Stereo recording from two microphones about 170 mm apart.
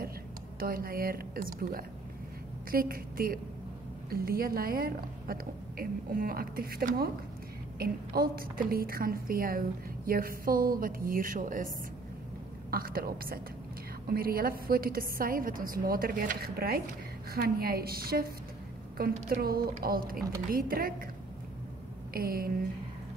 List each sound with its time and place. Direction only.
0.6 s a woman's voice: 60° right (ahead or behind)
12.7 s a woman's voice: 60° right (ahead or behind)
22.1 s a woman's voice: 60° right (ahead or behind)